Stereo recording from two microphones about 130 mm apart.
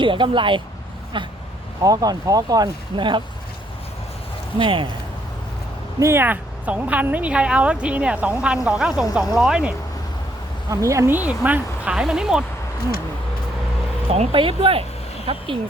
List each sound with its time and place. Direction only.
0.0 s speech: 40° right (ahead or behind)
4.5 s speech: 40° right (ahead or behind)
6.0 s a woman's voice: 20° right (ahead or behind)
10.7 s speech: 25° right (ahead or behind); by 12.5 s 5° right (ahead or behind)
14.3 s speech: 45° right (ahead or behind)